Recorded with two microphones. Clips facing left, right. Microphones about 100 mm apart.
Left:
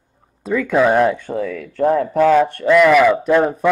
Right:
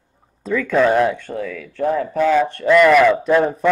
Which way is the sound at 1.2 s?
50° left (ahead or behind).